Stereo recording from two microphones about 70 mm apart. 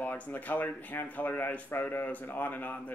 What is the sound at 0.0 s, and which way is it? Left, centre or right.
Speech, left.